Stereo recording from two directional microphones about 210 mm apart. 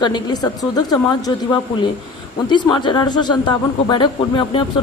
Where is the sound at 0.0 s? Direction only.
20° left (ahead or behind).